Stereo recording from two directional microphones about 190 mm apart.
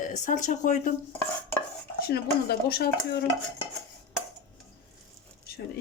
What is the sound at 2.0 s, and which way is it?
Speech, 55° left (ahead or behind).